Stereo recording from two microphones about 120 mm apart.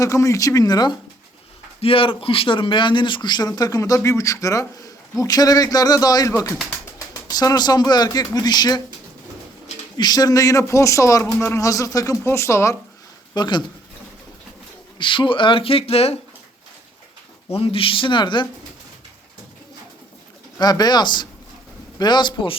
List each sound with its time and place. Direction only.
0.0 s speech: 25° left (ahead or behind)
1.8 s speech: 50° left (ahead or behind); by 6.3 s 30° left (ahead or behind)
6.3 s speech: 20° left (ahead or behind)
7.1 s speech: 30° left (ahead or behind)
10.0 s speech: 35° left (ahead or behind)
13.3 s speech: 40° left (ahead or behind)
14.9 s speech: 45° left (ahead or behind)
17.5 s speech: 50° left (ahead or behind)
20.6 s speech: 35° left (ahead or behind)